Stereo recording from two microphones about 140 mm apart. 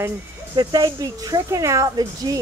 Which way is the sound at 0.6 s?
30° right (ahead or behind).